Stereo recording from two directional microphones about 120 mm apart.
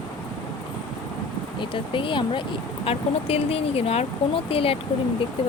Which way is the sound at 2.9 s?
55° left (ahead or behind).